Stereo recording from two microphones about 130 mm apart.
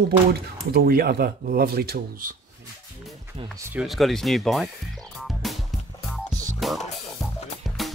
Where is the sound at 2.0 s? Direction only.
90° right.